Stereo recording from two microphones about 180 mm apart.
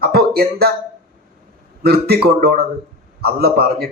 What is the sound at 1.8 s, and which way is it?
Speech, 60° right (ahead or behind).